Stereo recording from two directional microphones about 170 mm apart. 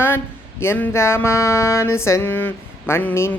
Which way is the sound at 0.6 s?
15° left (ahead or behind).